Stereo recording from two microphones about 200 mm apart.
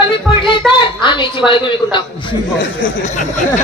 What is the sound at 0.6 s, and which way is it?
Speech, centre (ahead or behind).